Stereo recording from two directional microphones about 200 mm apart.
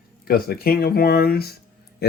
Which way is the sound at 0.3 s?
50° left (ahead or behind).